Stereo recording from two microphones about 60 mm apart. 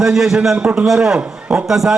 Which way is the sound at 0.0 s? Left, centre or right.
Centre.